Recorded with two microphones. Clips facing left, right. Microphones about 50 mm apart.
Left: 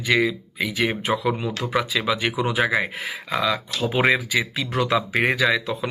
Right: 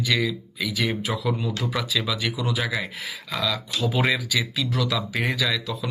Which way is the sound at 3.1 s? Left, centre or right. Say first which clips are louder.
Left 2 dB; centre.